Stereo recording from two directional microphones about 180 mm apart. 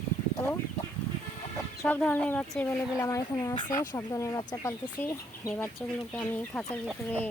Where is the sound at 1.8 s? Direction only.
10° left (ahead or behind).